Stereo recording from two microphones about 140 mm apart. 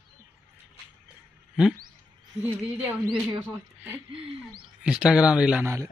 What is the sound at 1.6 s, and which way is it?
A woman's voice, 5° right (ahead or behind).